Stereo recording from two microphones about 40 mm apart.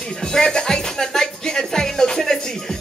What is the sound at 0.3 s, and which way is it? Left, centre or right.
Music, centre.